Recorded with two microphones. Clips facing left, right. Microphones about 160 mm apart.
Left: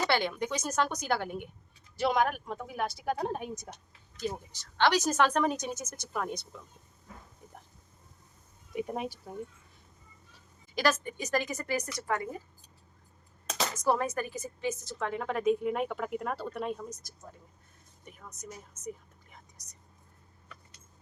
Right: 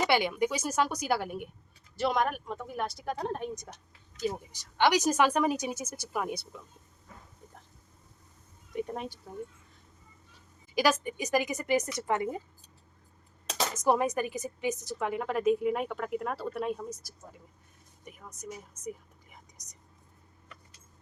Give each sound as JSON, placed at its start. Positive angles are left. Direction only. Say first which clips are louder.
{"t": 0.1, "sound": "a woman's voice", "louder": "right 3 dB", "side_deg": -10}
{"t": 4.5, "sound": "a woman's voice", "louder": "right 1 dB", "side_deg": -15}
{"t": 8.7, "sound": "speech", "louder": "left 1 dB", "side_deg": 10}
{"t": 10.8, "sound": "a woman's voice", "louder": "right 2 dB", "side_deg": -10}
{"t": 13.8, "sound": "a woman's voice", "louder": "right 3 dB", "side_deg": -15}